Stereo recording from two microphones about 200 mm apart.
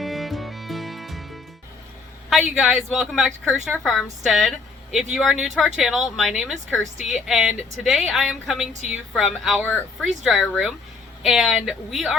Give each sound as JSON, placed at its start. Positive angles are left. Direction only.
{"t": 0.0, "sound": "music", "side_deg": 0}
{"t": 2.3, "sound": "speech", "side_deg": 0}